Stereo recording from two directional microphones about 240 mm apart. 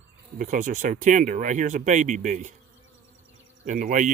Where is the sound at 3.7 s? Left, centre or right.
Right.